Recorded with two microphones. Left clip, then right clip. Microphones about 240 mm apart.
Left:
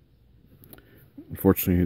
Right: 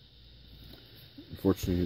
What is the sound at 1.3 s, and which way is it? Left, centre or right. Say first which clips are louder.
Speech: left 7 dB; left.